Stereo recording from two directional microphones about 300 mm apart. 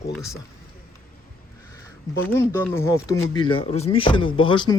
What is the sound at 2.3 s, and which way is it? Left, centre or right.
Speech, centre.